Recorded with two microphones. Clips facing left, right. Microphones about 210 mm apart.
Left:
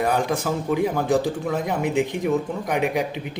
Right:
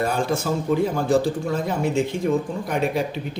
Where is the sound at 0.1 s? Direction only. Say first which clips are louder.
Even; 15° left (ahead or behind).